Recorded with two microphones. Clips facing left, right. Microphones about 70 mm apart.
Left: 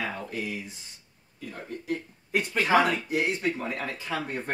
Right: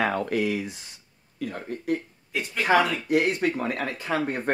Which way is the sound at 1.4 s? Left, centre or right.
Right.